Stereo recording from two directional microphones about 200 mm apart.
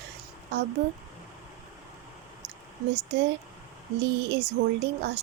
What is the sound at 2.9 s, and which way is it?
Speech, 60° right (ahead or behind).